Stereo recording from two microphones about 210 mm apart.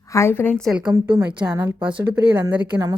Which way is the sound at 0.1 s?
10° left (ahead or behind).